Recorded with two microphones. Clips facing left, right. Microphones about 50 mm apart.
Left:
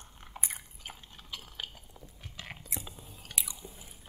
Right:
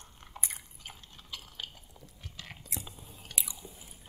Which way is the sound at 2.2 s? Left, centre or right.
Centre.